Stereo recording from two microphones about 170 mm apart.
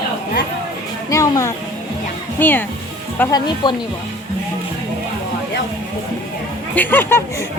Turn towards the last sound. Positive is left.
turn(degrees=15)  # may be behind; listen again after turning